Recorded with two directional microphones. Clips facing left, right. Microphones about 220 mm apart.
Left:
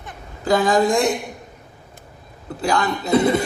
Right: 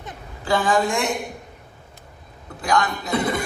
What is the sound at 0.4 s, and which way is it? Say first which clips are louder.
Speech: left 4 dB; 40° left (ahead or behind).